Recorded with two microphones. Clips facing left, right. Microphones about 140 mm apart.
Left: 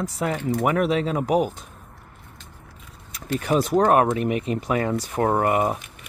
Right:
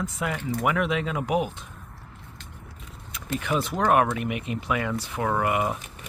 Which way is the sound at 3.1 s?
40° left (ahead or behind).